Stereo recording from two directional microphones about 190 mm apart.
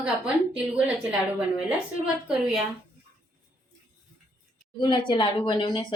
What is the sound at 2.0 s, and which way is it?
Speech, 5° right (ahead or behind).